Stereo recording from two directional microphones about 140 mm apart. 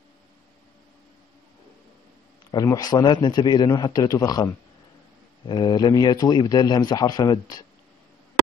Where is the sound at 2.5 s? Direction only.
25° left (ahead or behind).